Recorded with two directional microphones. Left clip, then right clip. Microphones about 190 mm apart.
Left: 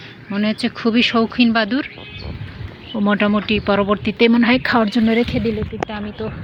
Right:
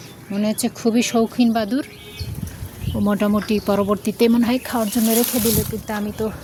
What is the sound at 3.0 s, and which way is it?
Speech, 10° right (ahead or behind).